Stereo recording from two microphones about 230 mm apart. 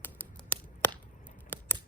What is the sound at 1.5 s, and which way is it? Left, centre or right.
Scissors, centre.